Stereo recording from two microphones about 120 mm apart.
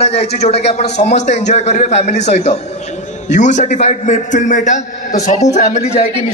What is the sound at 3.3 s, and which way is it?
A man's voice, 85° left.